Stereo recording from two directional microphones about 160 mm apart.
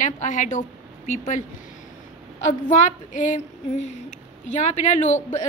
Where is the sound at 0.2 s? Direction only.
50° left (ahead or behind).